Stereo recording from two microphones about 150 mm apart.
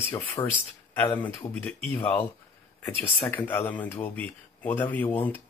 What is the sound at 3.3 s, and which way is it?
Speech, 15° left (ahead or behind).